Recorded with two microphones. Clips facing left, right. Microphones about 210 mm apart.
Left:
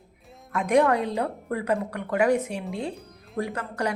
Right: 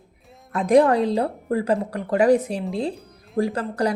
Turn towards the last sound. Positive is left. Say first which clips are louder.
# right 6 dB
turn(degrees=-35)  # may be behind; listen again after turning